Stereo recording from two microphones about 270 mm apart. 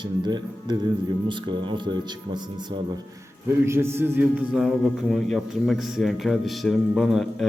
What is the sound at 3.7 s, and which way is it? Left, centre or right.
A man's voice, centre.